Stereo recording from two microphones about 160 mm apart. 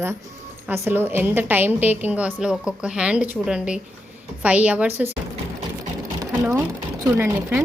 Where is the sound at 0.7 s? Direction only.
15° right (ahead or behind).